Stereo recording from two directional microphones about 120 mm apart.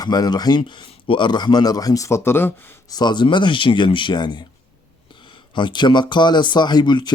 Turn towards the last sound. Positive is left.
turn(degrees=40)  # may be behind; listen again after turning